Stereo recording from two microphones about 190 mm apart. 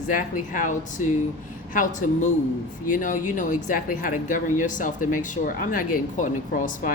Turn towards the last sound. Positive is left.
turn(degrees=45)  # may be behind; listen again after turning